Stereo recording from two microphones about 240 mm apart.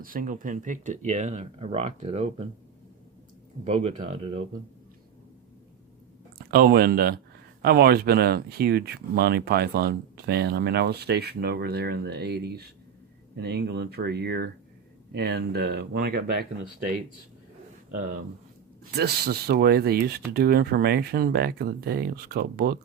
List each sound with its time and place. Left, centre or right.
0.0 s speech: right
3.6 s speech: right
6.5 s speech: right
18.9 s speech: right